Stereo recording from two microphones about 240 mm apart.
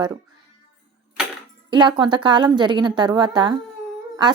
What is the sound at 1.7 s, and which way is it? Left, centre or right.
A woman's voice, centre.